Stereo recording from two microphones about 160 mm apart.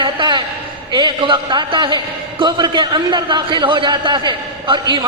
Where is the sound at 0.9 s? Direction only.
30° right (ahead or behind).